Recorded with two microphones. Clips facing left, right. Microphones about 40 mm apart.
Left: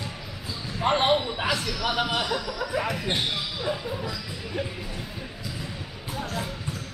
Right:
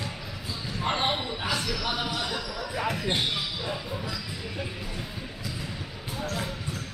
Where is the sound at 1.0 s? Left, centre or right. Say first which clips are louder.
Left 5 dB; centre.